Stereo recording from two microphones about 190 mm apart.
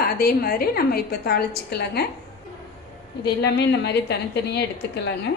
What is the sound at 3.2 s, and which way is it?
A woman's voice, 60° left (ahead or behind).